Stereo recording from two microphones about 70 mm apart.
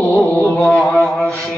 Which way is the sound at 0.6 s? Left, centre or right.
Centre.